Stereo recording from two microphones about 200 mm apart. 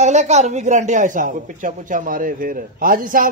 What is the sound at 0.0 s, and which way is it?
Speech, 35° right (ahead or behind).